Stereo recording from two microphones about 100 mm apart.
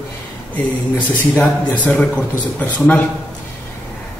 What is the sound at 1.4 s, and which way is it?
A man's voice, 15° left (ahead or behind).